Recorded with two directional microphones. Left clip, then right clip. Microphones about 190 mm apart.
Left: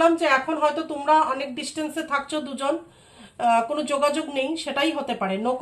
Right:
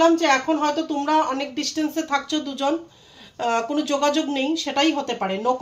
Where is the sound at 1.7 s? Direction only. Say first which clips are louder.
Right 2 dB; 35° right (ahead or behind).